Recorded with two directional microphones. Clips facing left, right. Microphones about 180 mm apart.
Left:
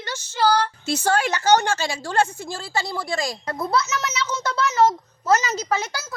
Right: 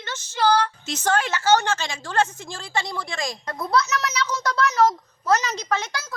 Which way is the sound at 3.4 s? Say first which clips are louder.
Left 3 dB; 25° left (ahead or behind).